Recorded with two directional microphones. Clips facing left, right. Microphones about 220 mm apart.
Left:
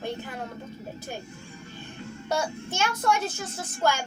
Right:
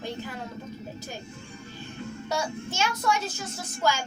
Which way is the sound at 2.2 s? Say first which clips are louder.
Left 2 dB; 55° left (ahead or behind).